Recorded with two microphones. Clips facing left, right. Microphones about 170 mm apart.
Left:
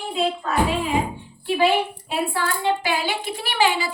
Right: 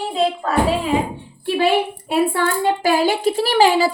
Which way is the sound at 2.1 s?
55° right (ahead or behind).